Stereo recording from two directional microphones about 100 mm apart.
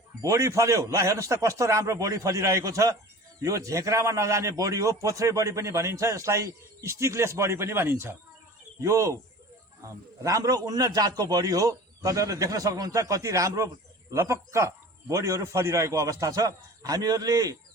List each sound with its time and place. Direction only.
0.2 s a man's voice: 30° right (ahead or behind)